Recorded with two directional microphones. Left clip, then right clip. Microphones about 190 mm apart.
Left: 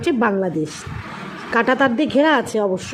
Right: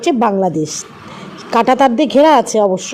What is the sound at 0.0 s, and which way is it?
A woman's voice, 15° right (ahead or behind).